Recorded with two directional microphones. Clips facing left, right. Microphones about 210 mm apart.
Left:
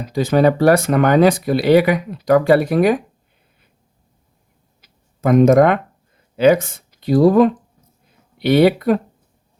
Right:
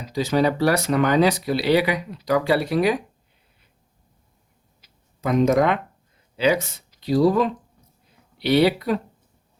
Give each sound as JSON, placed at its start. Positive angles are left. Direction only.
{"t": 0.0, "sound": "speech", "side_deg": 55}
{"t": 4.8, "sound": "a sound", "side_deg": 55}
{"t": 6.3, "sound": "speech", "side_deg": 50}